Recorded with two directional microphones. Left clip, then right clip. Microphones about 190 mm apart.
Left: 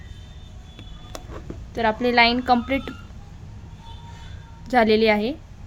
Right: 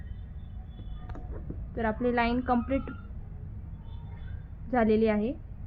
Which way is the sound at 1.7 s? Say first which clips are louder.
Left 9 dB; 20° left (ahead or behind).